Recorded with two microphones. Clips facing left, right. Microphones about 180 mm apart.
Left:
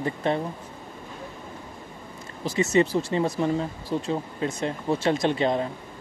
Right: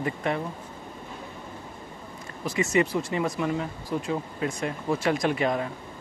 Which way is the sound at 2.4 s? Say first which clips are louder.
Left 3 dB; 25° left (ahead or behind).